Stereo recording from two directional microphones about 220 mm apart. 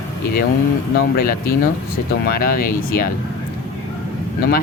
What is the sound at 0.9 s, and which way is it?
Speech, 45° left (ahead or behind).